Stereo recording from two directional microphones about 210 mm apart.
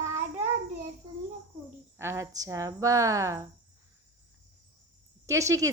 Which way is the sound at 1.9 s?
10° right (ahead or behind).